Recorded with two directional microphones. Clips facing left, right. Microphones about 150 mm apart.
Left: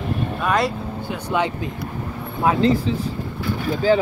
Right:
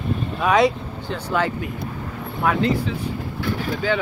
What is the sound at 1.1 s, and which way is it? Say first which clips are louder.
Speech: even; 15° left (ahead or behind).